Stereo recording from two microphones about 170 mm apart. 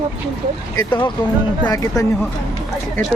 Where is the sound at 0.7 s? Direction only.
25° left (ahead or behind).